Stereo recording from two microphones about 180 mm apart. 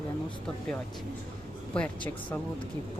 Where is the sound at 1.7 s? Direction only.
5° left (ahead or behind).